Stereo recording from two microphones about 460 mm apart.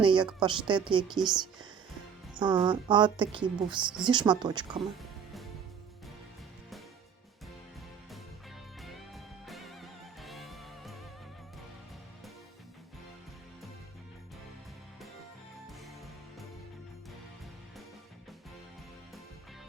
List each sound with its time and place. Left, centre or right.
0.0 s a woman's voice: centre
8.8 s music: centre